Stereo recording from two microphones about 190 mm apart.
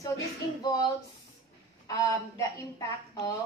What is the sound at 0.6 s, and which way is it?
Speech, 20° left (ahead or behind).